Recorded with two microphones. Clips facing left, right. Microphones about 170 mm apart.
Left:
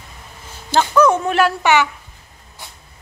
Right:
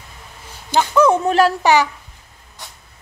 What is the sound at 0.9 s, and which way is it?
Speech, 30° right (ahead or behind).